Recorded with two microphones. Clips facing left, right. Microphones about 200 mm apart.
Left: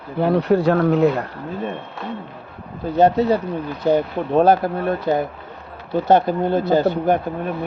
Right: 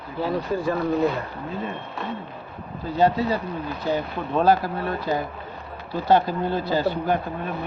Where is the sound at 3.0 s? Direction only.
60° left (ahead or behind).